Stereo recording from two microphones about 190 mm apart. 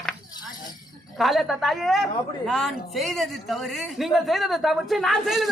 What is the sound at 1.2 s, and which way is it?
A woman's voice, centre (ahead or behind).